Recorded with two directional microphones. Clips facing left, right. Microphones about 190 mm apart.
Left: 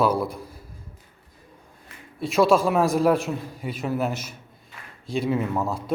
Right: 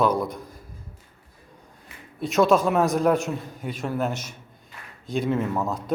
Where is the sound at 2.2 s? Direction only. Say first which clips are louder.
Even; centre (ahead or behind).